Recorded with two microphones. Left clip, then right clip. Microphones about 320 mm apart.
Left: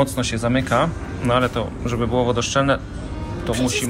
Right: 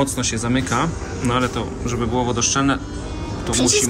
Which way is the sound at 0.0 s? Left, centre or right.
Centre.